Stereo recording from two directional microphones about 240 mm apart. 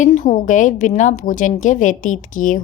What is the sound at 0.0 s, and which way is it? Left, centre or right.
A woman's voice, left.